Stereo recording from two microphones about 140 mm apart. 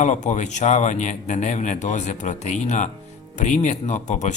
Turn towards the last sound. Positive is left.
turn(degrees=55)  # may be behind; listen again after turning